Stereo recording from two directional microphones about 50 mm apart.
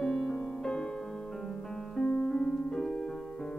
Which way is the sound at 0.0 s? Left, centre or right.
Centre.